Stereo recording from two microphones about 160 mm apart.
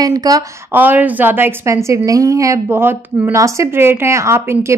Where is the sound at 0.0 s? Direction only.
25° right (ahead or behind).